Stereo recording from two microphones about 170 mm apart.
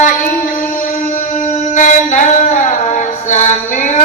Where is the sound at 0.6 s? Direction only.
50° left (ahead or behind).